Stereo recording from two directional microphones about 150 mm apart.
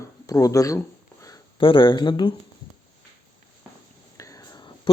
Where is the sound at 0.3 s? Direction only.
20° left (ahead or behind).